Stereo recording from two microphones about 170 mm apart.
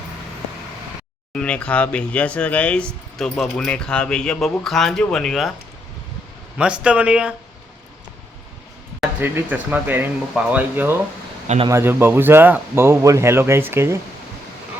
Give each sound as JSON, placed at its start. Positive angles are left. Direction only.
{"t": 1.3, "sound": "speech", "side_deg": 5}
{"t": 6.6, "sound": "speech", "side_deg": -5}
{"t": 9.0, "sound": "speech", "side_deg": -10}
{"t": 11.4, "sound": "speech", "side_deg": -40}
{"t": 11.7, "sound": "speech", "side_deg": -15}